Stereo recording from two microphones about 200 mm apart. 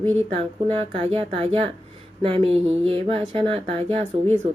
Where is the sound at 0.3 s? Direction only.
30° right (ahead or behind).